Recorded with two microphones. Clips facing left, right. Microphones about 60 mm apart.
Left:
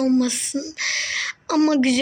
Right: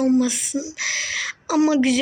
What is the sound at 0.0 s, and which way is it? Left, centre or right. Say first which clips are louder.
Speech: right 1 dB; centre.